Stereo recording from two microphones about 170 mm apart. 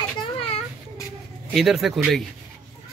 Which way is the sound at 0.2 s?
35° left (ahead or behind).